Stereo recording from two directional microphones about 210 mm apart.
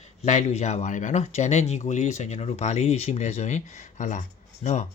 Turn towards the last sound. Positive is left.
turn(degrees=30)  # may be behind; listen again after turning